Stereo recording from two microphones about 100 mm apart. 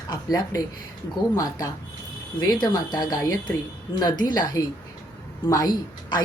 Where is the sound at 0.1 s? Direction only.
35° left (ahead or behind).